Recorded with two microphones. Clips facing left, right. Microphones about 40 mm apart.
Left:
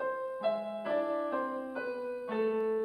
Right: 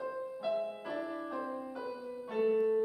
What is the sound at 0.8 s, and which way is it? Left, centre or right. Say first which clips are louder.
Music: left 7 dB; left.